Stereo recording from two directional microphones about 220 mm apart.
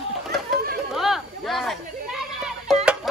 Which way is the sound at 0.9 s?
Centre (ahead or behind).